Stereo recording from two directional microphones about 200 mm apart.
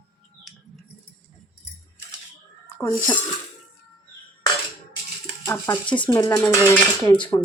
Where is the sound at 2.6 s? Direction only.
10° left (ahead or behind).